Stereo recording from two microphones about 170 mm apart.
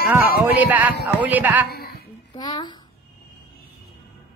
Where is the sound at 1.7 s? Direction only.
65° left (ahead or behind).